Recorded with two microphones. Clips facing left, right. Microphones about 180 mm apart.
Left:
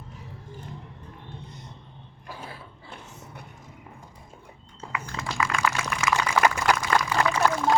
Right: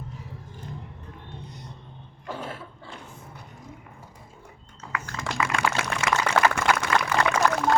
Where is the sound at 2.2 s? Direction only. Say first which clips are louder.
Right 6 dB; 75° right (ahead or behind).